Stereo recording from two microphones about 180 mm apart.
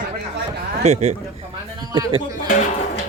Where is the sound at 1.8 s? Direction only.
20° right (ahead or behind).